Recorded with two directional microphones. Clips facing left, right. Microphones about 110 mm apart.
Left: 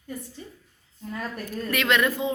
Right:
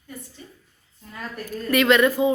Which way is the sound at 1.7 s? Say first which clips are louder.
Right 6 dB; centre (ahead or behind).